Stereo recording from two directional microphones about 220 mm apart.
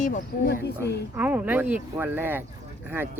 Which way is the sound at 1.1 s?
5° right (ahead or behind).